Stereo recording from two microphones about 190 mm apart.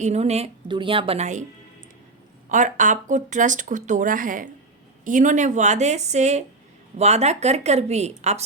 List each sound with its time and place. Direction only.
0.0 s speech: 35° right (ahead or behind)
2.5 s speech: 40° right (ahead or behind)